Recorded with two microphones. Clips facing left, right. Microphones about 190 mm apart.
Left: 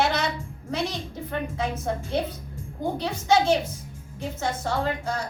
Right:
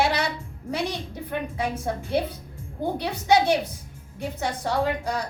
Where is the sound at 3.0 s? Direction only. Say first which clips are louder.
Right 1 dB; 15° right (ahead or behind).